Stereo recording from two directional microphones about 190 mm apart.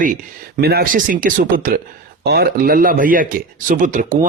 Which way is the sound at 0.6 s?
55° right (ahead or behind).